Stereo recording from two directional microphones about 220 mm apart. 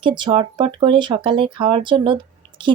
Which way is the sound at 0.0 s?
20° right (ahead or behind).